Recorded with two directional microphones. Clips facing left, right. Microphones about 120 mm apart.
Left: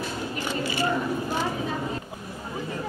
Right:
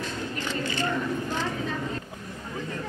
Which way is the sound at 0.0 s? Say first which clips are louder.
Left 2 dB; 10° left (ahead or behind).